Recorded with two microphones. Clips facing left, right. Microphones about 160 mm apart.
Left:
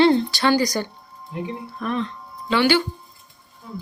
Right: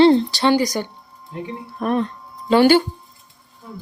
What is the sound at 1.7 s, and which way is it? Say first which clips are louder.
Speech: right 6 dB; 45° right (ahead or behind).